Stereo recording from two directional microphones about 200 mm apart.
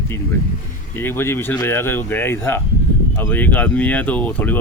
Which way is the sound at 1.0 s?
10° left (ahead or behind).